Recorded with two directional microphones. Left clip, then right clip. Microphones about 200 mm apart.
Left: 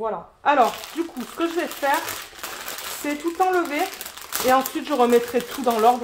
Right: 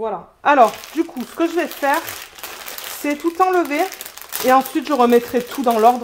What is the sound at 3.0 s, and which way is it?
Speech, 50° right (ahead or behind).